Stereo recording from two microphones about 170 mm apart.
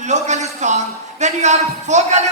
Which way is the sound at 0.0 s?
45° right (ahead or behind).